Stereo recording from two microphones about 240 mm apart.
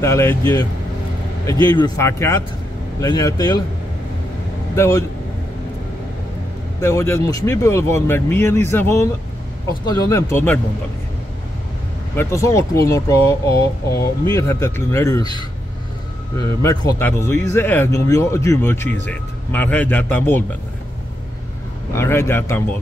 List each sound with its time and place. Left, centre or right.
0.0 s speech: centre
4.7 s speech: centre
6.8 s speech: centre
12.2 s speech: centre
16.3 s speech: centre
21.9 s speech: centre